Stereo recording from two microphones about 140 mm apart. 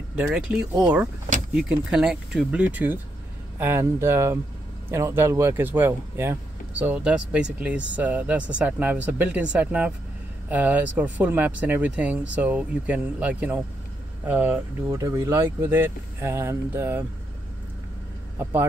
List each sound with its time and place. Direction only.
0.1 s speech: 5° right (ahead or behind)
15.0 s speech: 20° right (ahead or behind)
18.4 s speech: 15° right (ahead or behind)